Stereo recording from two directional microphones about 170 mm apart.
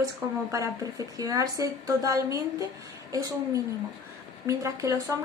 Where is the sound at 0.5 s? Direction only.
20° right (ahead or behind).